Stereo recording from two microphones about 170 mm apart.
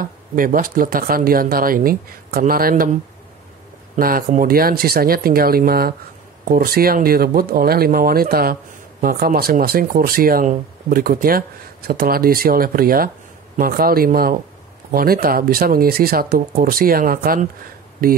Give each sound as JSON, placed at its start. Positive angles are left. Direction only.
{"t": 0.0, "sound": "speech", "side_deg": -55}
{"t": 3.9, "sound": "speech", "side_deg": -50}